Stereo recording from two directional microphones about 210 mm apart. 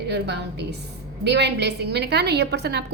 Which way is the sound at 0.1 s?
55° right (ahead or behind).